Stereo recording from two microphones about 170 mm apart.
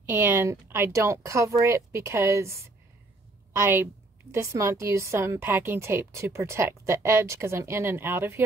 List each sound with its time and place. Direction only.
0.1 s a woman's voice: 15° right (ahead or behind)